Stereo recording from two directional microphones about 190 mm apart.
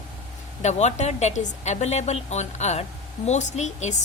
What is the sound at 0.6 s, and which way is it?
A woman's voice, 35° left (ahead or behind).